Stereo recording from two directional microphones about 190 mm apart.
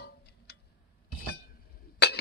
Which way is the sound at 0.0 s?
55° left (ahead or behind).